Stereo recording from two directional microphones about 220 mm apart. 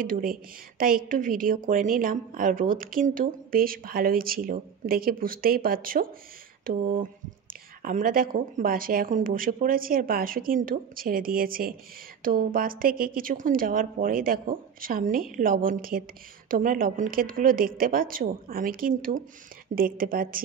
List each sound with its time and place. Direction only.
0.0 s speech: 40° right (ahead or behind)